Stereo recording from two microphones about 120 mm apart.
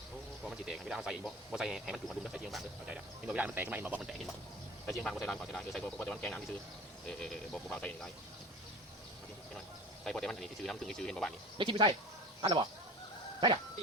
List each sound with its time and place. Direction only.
0.4 s speech: 5° right (ahead or behind)
4.9 s speech: centre (ahead or behind)
10.0 s speech: 5° left (ahead or behind)
11.5 s speech: 45° right (ahead or behind)